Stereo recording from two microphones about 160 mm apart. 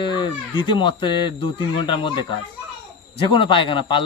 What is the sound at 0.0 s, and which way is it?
Speech, 30° left (ahead or behind).